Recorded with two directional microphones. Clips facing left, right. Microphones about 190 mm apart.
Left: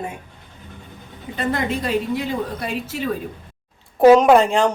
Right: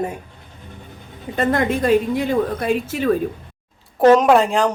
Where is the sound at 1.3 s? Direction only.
50° right (ahead or behind).